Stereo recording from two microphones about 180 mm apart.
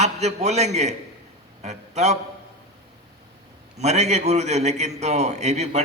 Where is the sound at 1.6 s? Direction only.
40° right (ahead or behind).